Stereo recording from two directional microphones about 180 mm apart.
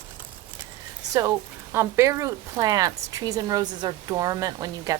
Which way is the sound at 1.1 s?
20° right (ahead or behind).